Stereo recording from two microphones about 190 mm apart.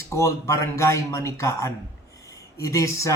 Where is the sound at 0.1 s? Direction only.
15° left (ahead or behind).